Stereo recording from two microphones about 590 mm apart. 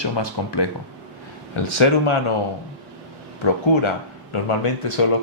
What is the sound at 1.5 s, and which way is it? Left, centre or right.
Speech, left.